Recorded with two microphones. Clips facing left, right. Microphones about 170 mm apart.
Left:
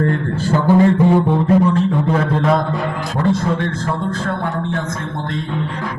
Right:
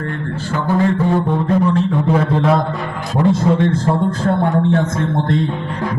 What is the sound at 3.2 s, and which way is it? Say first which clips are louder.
A man's voice: right 4 dB; 25° right (ahead or behind).